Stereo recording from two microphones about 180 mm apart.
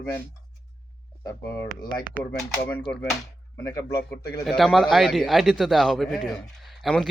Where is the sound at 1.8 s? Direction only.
25° left (ahead or behind).